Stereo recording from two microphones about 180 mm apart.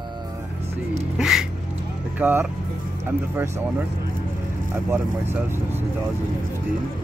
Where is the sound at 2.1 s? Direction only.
10° right (ahead or behind).